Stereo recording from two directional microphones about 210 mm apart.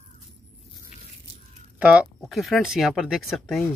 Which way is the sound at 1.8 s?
5° right (ahead or behind).